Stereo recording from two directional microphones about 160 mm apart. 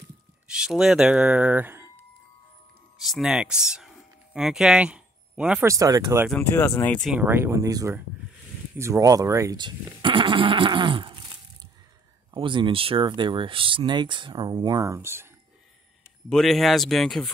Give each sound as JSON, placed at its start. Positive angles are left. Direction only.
{"t": 0.5, "sound": "speech", "side_deg": -5}
{"t": 3.0, "sound": "speech", "side_deg": 0}
{"t": 3.7, "sound": "a sound", "side_deg": -5}
{"t": 5.7, "sound": "speech", "side_deg": -20}
{"t": 6.5, "sound": "speech", "side_deg": 15}
{"t": 7.2, "sound": "speech", "side_deg": -15}
{"t": 12.4, "sound": "speech", "side_deg": -30}
{"t": 16.3, "sound": "speech", "side_deg": 0}